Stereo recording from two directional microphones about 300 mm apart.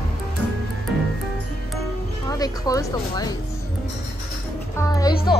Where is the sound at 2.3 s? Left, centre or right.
Centre.